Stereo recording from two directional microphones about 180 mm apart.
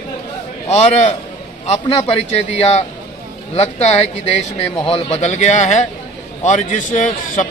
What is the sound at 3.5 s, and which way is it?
A man's voice, 35° left (ahead or behind).